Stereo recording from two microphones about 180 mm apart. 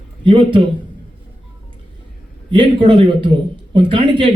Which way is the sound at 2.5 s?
25° right (ahead or behind).